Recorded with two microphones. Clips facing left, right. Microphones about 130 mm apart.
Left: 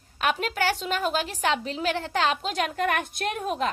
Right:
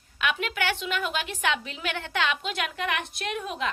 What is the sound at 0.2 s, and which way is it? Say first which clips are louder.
A woman's voice: left 3 dB; 40° left (ahead or behind).